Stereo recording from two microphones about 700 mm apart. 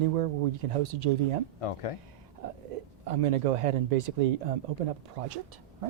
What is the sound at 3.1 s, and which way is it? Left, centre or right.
Speech, right.